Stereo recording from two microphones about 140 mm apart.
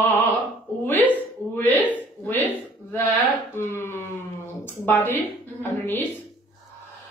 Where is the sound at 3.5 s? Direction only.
15° left (ahead or behind).